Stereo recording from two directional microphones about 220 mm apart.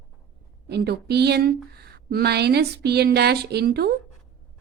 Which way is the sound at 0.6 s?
50° right (ahead or behind).